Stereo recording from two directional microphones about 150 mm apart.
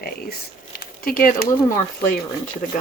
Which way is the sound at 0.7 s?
80° left.